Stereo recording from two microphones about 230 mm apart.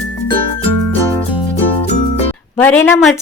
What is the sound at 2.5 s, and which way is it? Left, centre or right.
Speech, centre.